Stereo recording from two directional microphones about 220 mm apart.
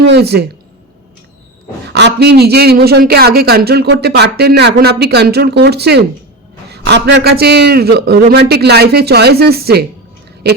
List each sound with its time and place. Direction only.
0.0 s a man's voice: 50° right (ahead or behind)
1.9 s a man's voice: 50° right (ahead or behind)